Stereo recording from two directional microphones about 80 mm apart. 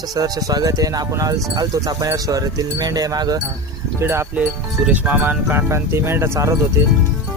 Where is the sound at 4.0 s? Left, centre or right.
Right.